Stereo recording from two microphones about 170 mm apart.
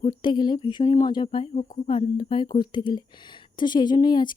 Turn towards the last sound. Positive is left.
turn(degrees=25)  # may be behind; listen again after turning